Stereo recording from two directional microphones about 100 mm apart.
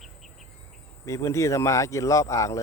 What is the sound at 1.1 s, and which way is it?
Speech, 30° left (ahead or behind).